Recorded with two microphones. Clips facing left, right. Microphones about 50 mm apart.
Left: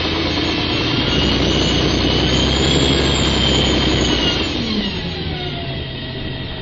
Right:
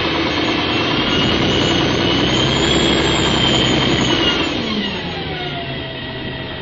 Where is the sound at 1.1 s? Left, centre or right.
Right.